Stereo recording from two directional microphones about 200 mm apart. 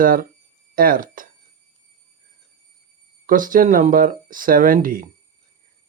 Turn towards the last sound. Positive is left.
turn(degrees=-45)  # may be behind; listen again after turning